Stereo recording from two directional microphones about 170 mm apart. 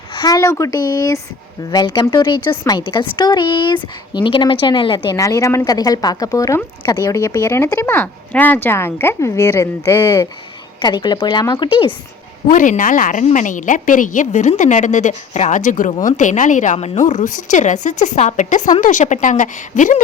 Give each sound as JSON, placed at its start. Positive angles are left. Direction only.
{"t": 0.1, "sound": "a woman's voice", "side_deg": 25}
{"t": 12.5, "sound": "a woman's voice", "side_deg": 50}